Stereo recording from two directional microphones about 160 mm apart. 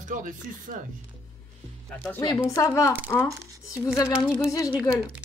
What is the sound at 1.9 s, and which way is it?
A woman's voice, 15° left (ahead or behind).